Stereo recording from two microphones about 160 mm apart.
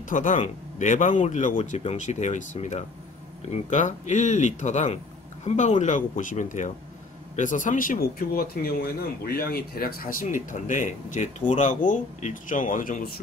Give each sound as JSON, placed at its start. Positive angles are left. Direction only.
{"t": 0.1, "sound": "speech", "side_deg": 55}